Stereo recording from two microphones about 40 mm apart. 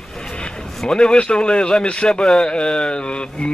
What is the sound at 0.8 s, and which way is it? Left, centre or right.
A man's voice, left.